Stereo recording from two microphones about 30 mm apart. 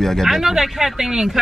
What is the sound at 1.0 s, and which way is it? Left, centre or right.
Speech, centre.